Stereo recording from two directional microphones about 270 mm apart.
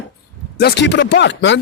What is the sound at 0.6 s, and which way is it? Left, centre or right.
Speech, left.